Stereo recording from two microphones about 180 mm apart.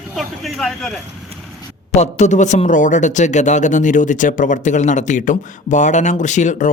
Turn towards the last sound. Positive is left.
turn(degrees=45)  # may be behind; listen again after turning